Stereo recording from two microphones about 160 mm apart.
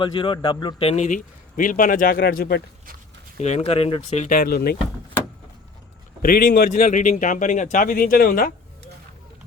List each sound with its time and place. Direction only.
0.0 s a man's voice: 30° left (ahead or behind); by 2.6 s 80° left
3.3 s speech: 45° left (ahead or behind)
4.3 s speech: 60° left (ahead or behind)
6.2 s a man's voice: 65° left (ahead or behind)